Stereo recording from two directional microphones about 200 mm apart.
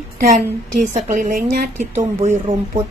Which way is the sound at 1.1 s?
40° right (ahead or behind).